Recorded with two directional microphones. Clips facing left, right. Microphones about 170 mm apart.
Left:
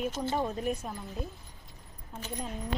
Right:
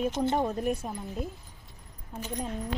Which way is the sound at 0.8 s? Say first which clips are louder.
Right 3 dB; 5° right (ahead or behind).